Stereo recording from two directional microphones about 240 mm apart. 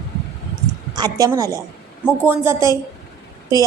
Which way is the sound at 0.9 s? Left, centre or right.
Centre.